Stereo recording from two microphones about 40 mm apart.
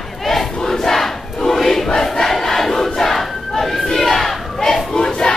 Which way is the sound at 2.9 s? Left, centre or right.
Centre.